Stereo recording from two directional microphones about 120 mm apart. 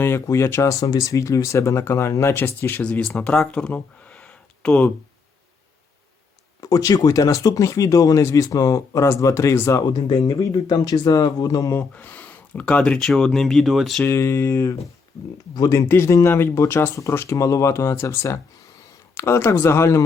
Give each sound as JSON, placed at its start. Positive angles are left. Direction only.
{"t": 0.0, "sound": "speech", "side_deg": 20}
{"t": 6.6, "sound": "speech", "side_deg": 30}
{"t": 10.1, "sound": "speech", "side_deg": 45}
{"t": 11.7, "sound": "speech", "side_deg": 15}
{"t": 14.0, "sound": "speech", "side_deg": 20}
{"t": 15.5, "sound": "speech", "side_deg": 30}